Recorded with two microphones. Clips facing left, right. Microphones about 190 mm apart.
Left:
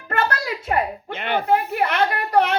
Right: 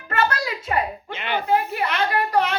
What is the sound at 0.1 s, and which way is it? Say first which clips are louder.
A woman's voice: even; 55° left (ahead or behind).